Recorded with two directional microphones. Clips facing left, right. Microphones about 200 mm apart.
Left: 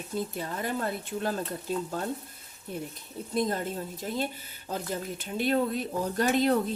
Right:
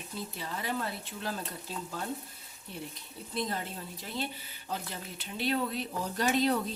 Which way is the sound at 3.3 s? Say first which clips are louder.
Left 6 dB; 45° left (ahead or behind).